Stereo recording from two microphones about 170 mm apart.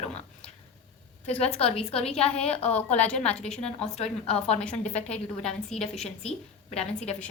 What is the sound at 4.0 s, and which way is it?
Speech, 40° left (ahead or behind).